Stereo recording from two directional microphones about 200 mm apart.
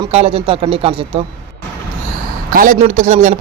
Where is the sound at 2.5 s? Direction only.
40° right (ahead or behind).